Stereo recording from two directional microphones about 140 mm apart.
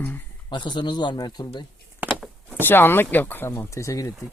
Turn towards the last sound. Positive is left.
turn(degrees=20)  # may be behind; listen again after turning